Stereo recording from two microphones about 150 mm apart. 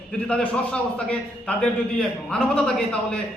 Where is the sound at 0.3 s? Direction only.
5° left (ahead or behind).